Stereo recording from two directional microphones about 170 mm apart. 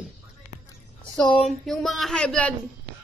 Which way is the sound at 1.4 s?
Centre (ahead or behind).